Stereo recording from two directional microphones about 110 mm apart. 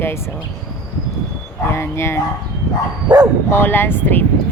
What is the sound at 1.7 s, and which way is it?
Speech, 25° left (ahead or behind).